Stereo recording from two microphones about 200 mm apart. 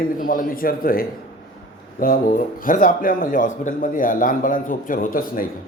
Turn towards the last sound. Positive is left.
turn(degrees=45)  # may be behind; listen again after turning